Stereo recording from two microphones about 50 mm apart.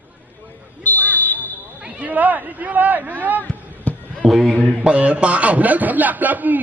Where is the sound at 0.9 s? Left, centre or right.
Left.